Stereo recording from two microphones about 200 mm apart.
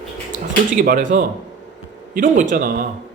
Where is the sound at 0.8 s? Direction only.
40° right (ahead or behind).